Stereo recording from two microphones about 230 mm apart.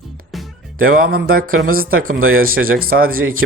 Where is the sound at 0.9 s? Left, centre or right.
Right.